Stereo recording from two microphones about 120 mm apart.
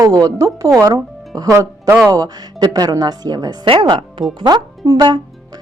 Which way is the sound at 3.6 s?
45° right (ahead or behind).